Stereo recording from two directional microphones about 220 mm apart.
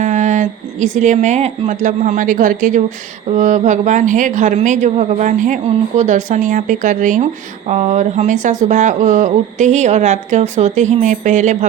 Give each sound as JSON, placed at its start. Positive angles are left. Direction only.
{"t": 0.0, "sound": "speech", "side_deg": -35}